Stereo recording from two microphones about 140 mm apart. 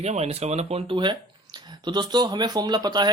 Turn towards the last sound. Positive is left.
turn(degrees=-30)  # may be behind; listen again after turning